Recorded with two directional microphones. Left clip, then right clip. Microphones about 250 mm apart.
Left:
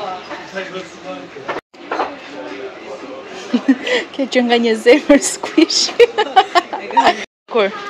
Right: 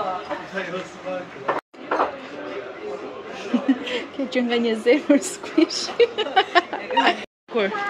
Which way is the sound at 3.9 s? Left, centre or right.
Centre.